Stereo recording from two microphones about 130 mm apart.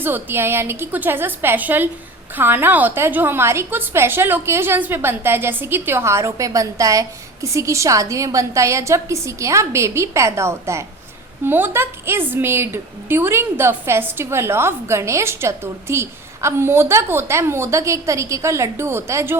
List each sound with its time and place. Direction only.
0.0 s a woman's voice: 15° right (ahead or behind)